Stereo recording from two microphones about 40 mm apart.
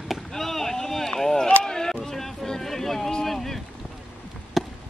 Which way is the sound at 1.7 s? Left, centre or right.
Centre.